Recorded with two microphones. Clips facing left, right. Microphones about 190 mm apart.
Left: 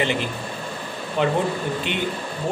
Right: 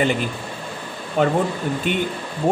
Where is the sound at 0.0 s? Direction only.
45° right (ahead or behind).